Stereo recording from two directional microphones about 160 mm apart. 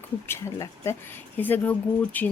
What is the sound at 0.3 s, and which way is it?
Speech, 15° left (ahead or behind).